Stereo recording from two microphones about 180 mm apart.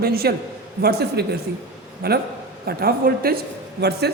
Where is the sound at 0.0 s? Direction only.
60° right (ahead or behind).